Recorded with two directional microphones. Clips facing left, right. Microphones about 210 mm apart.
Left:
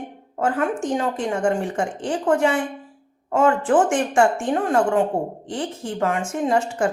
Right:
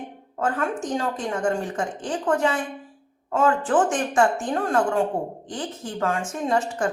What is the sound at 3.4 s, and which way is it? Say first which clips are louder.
A woman's voice: left 3 dB; 25° left (ahead or behind).